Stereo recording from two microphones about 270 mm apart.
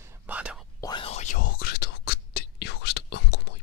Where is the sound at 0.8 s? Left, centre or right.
Centre.